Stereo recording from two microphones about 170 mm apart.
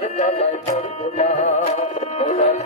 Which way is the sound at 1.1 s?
40° left (ahead or behind).